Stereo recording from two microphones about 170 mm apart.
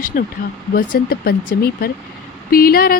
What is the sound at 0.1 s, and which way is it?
Speech, 60° left (ahead or behind).